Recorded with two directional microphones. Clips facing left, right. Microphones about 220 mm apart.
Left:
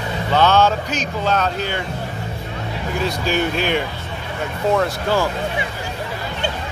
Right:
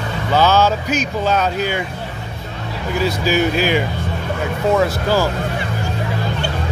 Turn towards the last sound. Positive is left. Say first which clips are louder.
# right 2 dB
turn(degrees=-5)  # may be behind; listen again after turning